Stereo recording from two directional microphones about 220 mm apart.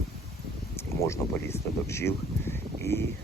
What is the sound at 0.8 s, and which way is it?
Speech, 10° left (ahead or behind).